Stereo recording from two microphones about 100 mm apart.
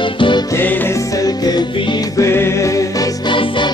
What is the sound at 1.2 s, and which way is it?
Music, 40° left (ahead or behind).